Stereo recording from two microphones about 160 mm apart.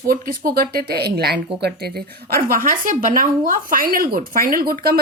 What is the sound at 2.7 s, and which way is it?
Speech, 60° right (ahead or behind).